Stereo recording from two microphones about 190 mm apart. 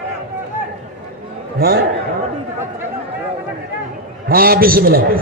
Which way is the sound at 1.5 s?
55° right (ahead or behind).